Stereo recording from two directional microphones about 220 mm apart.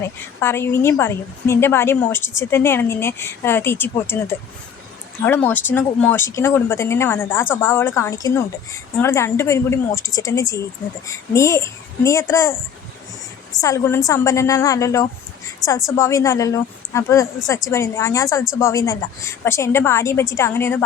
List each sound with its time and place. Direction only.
0.3 s a woman's voice: 10° left (ahead or behind)
13.6 s a woman's voice: 15° left (ahead or behind)